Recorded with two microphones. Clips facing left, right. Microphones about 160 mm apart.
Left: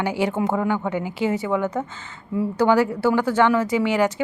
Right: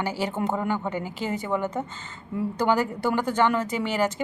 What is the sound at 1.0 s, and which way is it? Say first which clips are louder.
Speech: left 6 dB; 10° left (ahead or behind).